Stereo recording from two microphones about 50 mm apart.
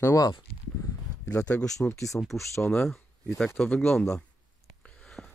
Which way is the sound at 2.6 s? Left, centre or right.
Centre.